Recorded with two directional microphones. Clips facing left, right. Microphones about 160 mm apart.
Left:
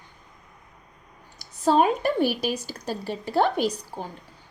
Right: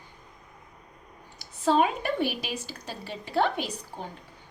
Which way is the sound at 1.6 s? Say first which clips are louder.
Left 4 dB; 40° left (ahead or behind).